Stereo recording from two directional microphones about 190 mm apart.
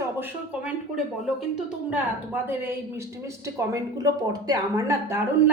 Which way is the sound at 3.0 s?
15° right (ahead or behind).